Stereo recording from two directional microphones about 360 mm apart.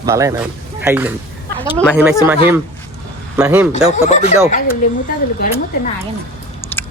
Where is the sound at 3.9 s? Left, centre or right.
Centre.